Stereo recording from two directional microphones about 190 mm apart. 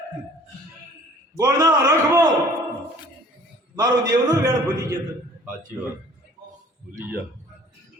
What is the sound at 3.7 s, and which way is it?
A man's voice, 20° right (ahead or behind).